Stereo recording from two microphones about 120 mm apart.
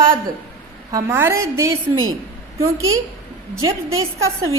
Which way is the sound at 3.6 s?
25° right (ahead or behind).